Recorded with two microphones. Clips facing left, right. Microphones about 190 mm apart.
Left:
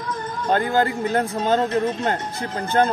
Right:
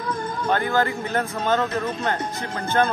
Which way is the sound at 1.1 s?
35° left (ahead or behind).